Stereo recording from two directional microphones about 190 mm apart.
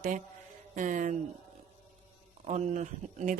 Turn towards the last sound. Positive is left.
turn(degrees=-40)  # may be behind; listen again after turning